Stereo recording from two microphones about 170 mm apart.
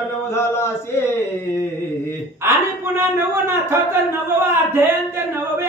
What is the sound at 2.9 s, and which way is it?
Speech, 15° right (ahead or behind).